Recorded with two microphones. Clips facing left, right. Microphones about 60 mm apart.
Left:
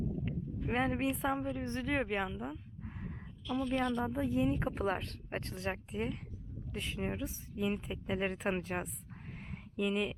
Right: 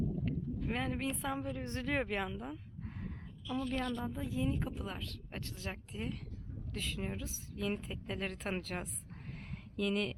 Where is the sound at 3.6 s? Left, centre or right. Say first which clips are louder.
Left 5 dB; left.